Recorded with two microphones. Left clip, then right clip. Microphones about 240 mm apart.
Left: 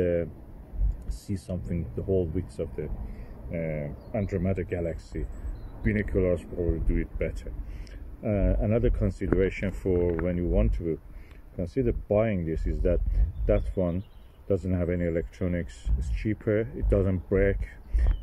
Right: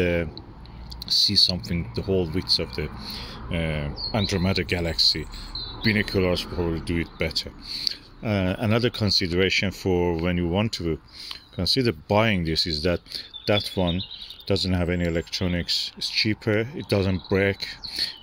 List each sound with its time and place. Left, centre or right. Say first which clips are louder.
0.0 s speech: right 2 dB; right
2.0 s speech: right 2 dB; right
2.6 s speech: right 3 dB; right
4.1 s speech: right 5 dB; right